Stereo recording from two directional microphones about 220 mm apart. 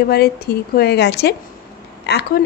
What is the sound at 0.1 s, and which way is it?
A woman's voice, 45° left (ahead or behind).